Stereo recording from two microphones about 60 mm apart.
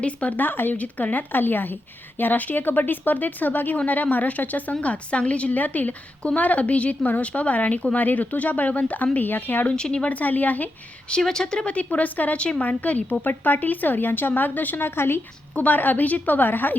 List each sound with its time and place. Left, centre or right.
0.0 s a woman's voice: left
9.6 s speech: centre
10.1 s a woman's voice: left
11.1 s a woman's voice: centre; by 15.2 s left
15.5 s a woman's voice: left